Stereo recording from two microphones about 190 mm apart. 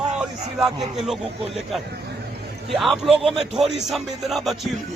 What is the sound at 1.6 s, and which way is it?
Music, centre (ahead or behind).